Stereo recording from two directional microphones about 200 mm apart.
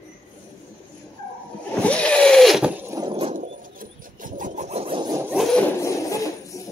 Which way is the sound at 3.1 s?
35° right (ahead or behind).